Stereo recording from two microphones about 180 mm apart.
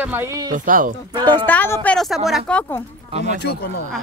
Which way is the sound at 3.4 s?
65° left (ahead or behind).